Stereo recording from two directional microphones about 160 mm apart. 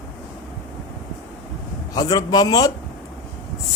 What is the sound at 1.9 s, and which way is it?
Speech, 25° left (ahead or behind).